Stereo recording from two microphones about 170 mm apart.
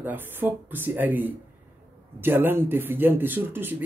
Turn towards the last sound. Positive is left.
turn(degrees=-10)  # may be behind; listen again after turning